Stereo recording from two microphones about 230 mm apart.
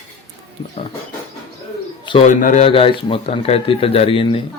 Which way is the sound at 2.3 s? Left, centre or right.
Left.